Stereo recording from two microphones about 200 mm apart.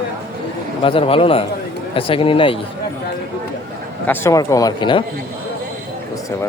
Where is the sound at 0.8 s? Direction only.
25° left (ahead or behind).